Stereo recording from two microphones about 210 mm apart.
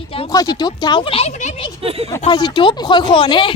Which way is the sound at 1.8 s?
30° right (ahead or behind).